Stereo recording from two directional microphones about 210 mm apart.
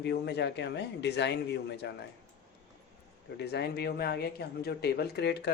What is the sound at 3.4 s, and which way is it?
Speech, 50° left (ahead or behind).